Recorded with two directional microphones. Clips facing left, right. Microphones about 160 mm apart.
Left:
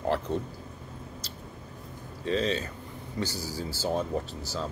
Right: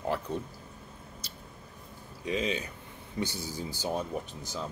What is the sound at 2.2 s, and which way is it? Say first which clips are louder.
Speech: left 3 dB; 15° right (ahead or behind).